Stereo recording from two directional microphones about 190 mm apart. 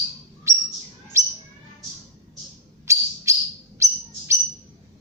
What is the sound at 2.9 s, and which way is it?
Bird, 15° right (ahead or behind).